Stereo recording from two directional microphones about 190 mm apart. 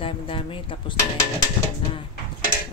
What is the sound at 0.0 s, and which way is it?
Speech, 30° left (ahead or behind).